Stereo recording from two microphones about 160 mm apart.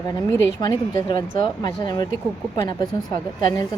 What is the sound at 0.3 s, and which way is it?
A woman's voice, 25° left (ahead or behind).